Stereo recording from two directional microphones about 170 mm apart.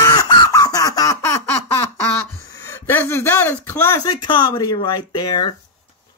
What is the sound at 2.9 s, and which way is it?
Speech, 15° left (ahead or behind).